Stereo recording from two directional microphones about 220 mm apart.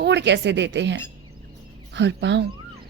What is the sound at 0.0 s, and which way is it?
A woman's voice, 50° right (ahead or behind).